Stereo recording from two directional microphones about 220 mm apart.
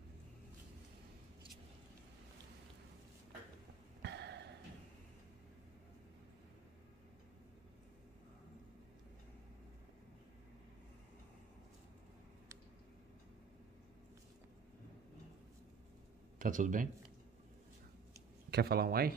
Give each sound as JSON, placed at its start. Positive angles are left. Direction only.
{"t": 4.0, "sound": "a sound", "side_deg": -50}
{"t": 16.3, "sound": "speech", "side_deg": -35}
{"t": 18.5, "sound": "speech", "side_deg": -45}